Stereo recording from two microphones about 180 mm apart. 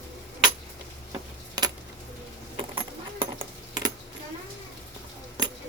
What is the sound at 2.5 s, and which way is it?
Keys jangling, 30° right (ahead or behind).